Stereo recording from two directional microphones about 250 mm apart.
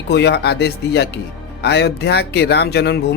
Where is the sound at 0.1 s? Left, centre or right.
Left.